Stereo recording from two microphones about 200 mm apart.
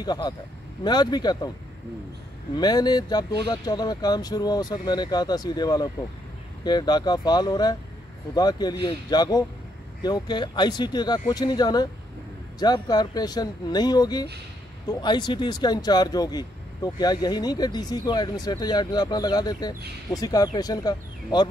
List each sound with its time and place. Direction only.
0.0 s speech: 20° left (ahead or behind)
2.5 s speech: 20° left (ahead or behind)